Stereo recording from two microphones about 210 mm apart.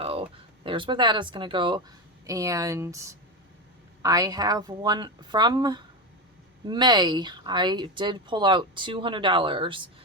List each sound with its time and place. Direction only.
0.0 s a woman's voice: 25° right (ahead or behind)